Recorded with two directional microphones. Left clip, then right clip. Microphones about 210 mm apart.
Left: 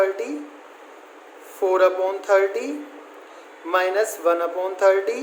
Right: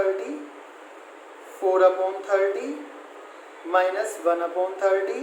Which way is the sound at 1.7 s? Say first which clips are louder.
Left 1 dB; 50° left (ahead or behind).